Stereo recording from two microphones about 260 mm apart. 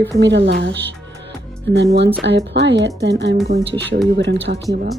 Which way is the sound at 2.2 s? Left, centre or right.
Right.